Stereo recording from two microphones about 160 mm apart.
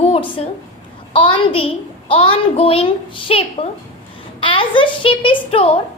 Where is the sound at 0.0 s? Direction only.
35° left (ahead or behind).